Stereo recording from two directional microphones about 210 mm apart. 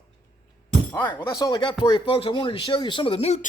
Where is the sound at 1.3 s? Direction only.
20° left (ahead or behind).